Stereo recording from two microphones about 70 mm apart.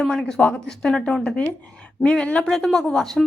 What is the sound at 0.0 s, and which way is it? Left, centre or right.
Speech, centre.